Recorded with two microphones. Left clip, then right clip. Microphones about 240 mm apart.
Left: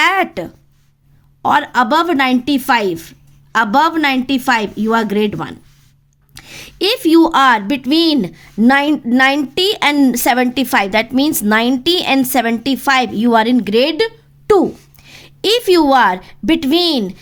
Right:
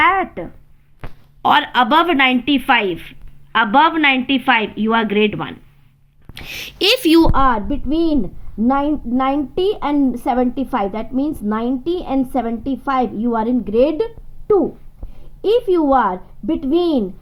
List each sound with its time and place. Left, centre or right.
0.0 s a sound: left
1.4 s a woman's voice: left
3.5 s a woman's voice: left
6.3 s a woman's voice: left